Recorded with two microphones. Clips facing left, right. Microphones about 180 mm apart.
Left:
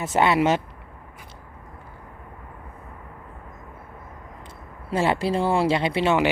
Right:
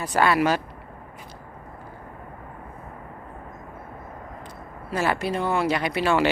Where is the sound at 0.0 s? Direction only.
25° left (ahead or behind).